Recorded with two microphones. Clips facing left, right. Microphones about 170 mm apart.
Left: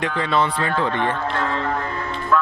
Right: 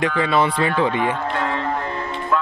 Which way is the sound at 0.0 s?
5° right (ahead or behind).